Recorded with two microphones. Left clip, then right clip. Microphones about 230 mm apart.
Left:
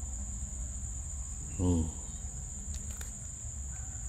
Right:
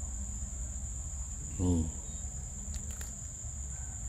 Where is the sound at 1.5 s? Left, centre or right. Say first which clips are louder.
Left 1 dB; centre.